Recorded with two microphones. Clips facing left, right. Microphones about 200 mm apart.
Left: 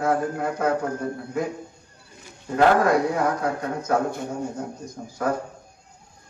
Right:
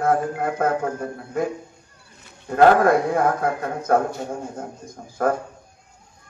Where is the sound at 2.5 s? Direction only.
55° right (ahead or behind).